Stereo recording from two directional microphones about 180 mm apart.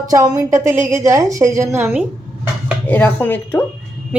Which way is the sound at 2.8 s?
10° left (ahead or behind).